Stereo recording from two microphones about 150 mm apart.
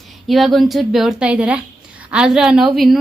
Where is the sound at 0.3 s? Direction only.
Centre (ahead or behind).